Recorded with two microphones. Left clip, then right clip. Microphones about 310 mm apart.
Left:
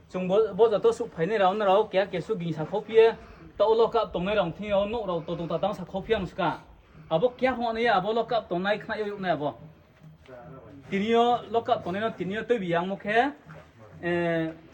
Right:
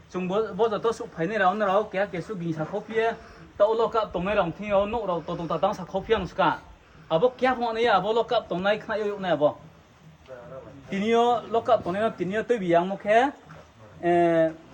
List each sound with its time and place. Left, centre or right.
0.1 s a man's voice: left
3.6 s a man's voice: centre
10.9 s a man's voice: right